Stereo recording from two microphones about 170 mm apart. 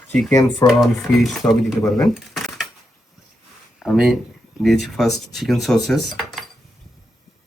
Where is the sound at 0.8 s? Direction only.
Centre (ahead or behind).